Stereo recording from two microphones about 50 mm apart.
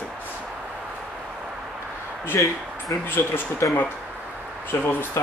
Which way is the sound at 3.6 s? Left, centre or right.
Left.